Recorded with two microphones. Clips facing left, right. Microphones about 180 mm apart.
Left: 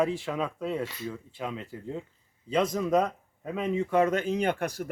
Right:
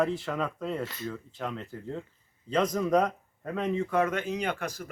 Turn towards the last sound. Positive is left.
turn(degrees=55)  # may be behind; listen again after turning